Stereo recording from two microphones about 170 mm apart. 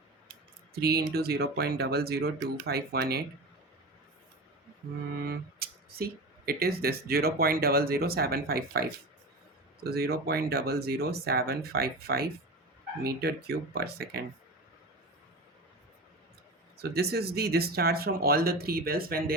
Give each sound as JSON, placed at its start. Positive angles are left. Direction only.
{"t": 0.7, "sound": "speech", "side_deg": -65}
{"t": 5.1, "sound": "speech", "side_deg": -65}
{"t": 16.7, "sound": "speech", "side_deg": -65}